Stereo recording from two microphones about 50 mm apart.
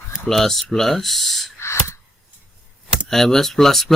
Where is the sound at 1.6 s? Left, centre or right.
Left.